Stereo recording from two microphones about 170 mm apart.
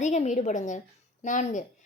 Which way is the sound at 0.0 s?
45° left (ahead or behind).